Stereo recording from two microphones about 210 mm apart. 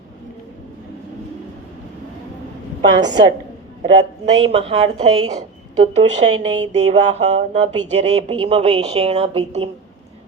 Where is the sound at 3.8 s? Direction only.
25° right (ahead or behind).